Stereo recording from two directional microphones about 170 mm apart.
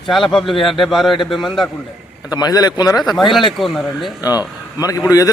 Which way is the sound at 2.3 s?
25° left (ahead or behind).